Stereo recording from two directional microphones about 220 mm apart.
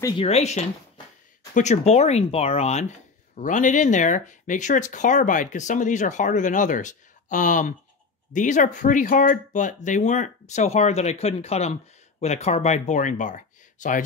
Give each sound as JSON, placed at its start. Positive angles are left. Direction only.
{"t": 0.2, "sound": "speech", "side_deg": 30}